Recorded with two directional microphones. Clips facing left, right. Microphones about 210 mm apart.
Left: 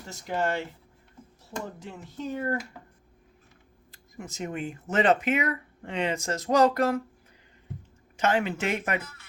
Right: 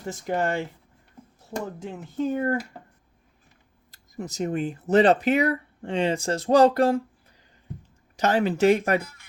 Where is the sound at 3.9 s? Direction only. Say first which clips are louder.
Right 6 dB; 40° right (ahead or behind).